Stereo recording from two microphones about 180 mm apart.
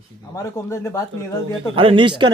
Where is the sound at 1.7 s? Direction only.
30° right (ahead or behind).